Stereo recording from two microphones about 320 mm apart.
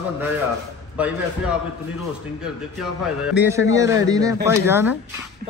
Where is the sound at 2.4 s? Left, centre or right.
Centre.